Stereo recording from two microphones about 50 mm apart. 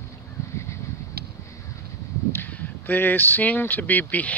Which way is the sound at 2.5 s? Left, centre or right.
Left.